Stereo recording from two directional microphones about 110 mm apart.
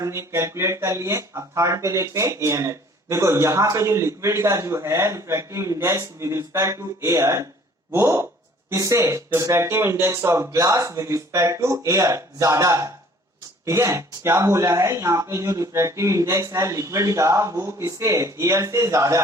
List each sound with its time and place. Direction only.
0.0 s speech: 25° right (ahead or behind)